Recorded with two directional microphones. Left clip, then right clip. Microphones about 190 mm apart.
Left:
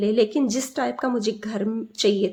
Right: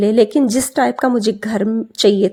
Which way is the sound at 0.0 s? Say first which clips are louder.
Right 7 dB; 40° right (ahead or behind).